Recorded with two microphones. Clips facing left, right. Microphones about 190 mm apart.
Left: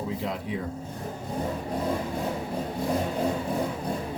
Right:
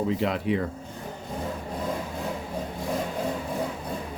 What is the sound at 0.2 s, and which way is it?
Speech, 75° right (ahead or behind).